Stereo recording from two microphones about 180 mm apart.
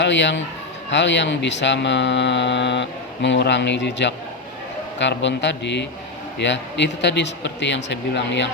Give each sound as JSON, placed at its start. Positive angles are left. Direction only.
{"t": 0.0, "sound": "speech", "side_deg": 80}